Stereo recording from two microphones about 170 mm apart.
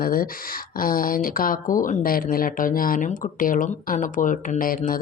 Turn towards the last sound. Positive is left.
turn(degrees=55)  # may be behind; listen again after turning